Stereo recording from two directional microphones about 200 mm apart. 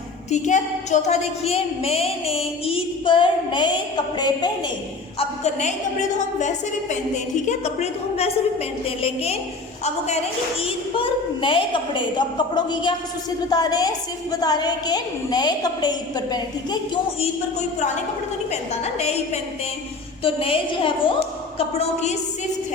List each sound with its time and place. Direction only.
0.3 s a woman's voice: 35° left (ahead or behind); by 4.5 s 20° left (ahead or behind)
5.4 s a woman's voice: 35° left (ahead or behind)
18.5 s a woman's voice: 35° left (ahead or behind)